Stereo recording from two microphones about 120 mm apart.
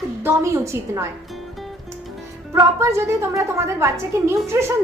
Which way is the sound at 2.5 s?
25° right (ahead or behind).